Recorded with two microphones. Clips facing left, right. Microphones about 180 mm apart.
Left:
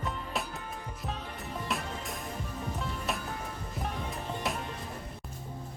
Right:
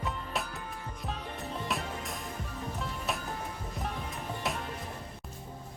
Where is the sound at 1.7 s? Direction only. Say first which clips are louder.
Even; centre (ahead or behind).